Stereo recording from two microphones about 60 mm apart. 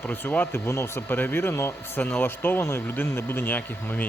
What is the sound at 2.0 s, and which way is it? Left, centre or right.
Speech, left.